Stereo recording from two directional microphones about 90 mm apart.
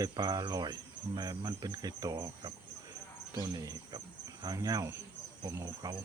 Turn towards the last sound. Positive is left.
turn(degrees=-45)  # may be behind; listen again after turning